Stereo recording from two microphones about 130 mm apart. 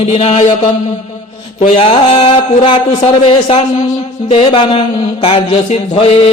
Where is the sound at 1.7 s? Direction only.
50° left (ahead or behind).